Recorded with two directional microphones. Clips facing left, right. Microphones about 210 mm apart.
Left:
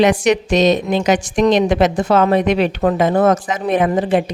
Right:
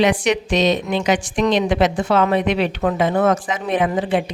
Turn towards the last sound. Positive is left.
turn(degrees=45)  # may be behind; listen again after turning